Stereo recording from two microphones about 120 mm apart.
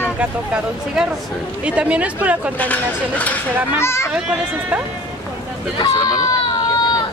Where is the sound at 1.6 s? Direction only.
10° right (ahead or behind).